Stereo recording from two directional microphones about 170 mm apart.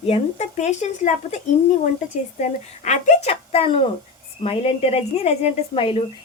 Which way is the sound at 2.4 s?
45° left (ahead or behind).